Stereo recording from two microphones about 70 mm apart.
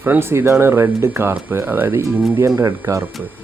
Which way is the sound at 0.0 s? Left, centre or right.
Right.